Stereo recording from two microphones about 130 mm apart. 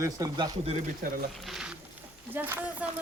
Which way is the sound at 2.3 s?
15° right (ahead or behind).